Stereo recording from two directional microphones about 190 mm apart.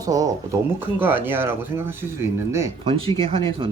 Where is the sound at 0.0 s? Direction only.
20° right (ahead or behind).